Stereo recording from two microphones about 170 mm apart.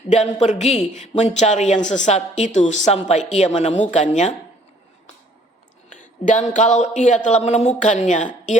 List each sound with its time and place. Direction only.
0.1 s a woman's voice: 45° left (ahead or behind)
6.0 s a woman's voice: 45° left (ahead or behind)